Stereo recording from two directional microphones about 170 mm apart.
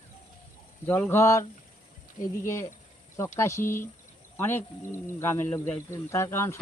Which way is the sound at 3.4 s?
15° left (ahead or behind).